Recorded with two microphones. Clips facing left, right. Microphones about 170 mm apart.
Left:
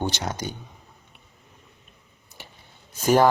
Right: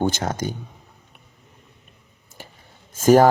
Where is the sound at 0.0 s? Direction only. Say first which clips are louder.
Right 5 dB; 50° right (ahead or behind).